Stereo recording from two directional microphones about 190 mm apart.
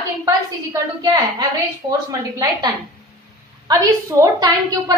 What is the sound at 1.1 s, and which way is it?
A woman's voice, 20° right (ahead or behind).